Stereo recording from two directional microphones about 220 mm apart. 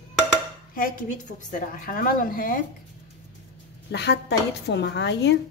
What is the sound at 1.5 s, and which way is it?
A woman's voice, 40° left (ahead or behind).